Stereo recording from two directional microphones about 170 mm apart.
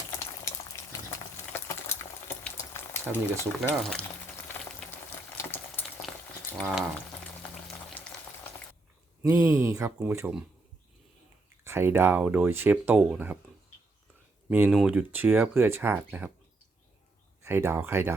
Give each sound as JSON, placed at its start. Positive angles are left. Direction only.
{"t": 0.7, "sound": "boiling", "side_deg": 15}
{"t": 1.5, "sound": "stir", "side_deg": 15}
{"t": 2.6, "sound": "frying", "side_deg": 15}
{"t": 3.8, "sound": "speech", "side_deg": 0}
{"t": 4.4, "sound": "boiling", "side_deg": 10}
{"t": 5.4, "sound": "water", "side_deg": 10}
{"t": 6.6, "sound": "frying", "side_deg": 0}
{"t": 8.0, "sound": "frying", "side_deg": 10}
{"t": 9.2, "sound": "speech", "side_deg": -20}
{"t": 11.6, "sound": "speech", "side_deg": -15}
{"t": 14.5, "sound": "speech", "side_deg": -10}
{"t": 17.4, "sound": "speech", "side_deg": -15}